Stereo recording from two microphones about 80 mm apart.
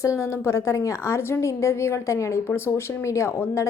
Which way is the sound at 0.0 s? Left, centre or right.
Left.